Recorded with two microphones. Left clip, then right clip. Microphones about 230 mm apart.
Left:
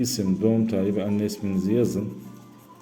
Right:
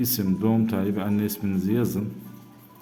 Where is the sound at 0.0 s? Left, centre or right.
Centre.